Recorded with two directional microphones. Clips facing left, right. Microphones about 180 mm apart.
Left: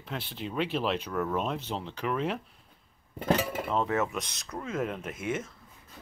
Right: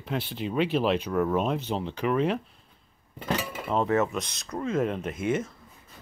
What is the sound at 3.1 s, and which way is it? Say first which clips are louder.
Dishes: left 3 dB; 50° left (ahead or behind).